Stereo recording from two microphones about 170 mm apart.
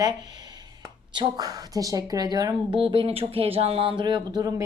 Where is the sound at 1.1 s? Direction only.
25° right (ahead or behind).